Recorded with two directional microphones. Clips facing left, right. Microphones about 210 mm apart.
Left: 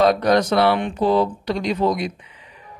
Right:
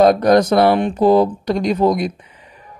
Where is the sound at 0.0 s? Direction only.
45° right (ahead or behind).